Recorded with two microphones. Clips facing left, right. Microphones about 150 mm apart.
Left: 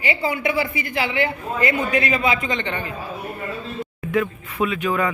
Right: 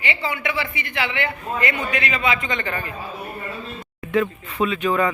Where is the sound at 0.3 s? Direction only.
40° left (ahead or behind).